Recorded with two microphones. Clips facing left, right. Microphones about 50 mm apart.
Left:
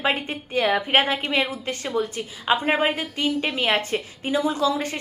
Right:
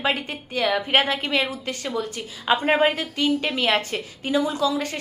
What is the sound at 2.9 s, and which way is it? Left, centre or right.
A woman's voice, left.